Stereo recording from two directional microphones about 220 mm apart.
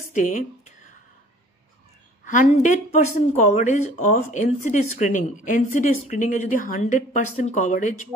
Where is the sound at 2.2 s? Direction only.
35° left (ahead or behind).